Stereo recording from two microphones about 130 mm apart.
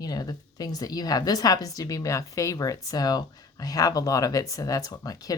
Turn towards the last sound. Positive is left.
turn(degrees=30)  # may be behind; listen again after turning